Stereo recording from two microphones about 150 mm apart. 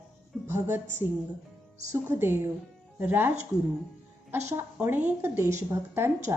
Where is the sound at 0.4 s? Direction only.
15° right (ahead or behind).